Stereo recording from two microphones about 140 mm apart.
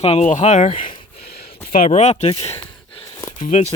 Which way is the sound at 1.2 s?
90° left.